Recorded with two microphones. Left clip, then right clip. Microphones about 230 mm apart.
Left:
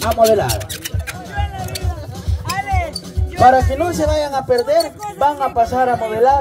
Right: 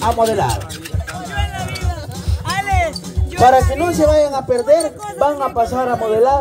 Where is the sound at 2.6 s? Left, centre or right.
Right.